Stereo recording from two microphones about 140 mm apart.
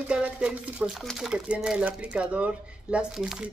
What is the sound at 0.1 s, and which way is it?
Speech, 5° right (ahead or behind).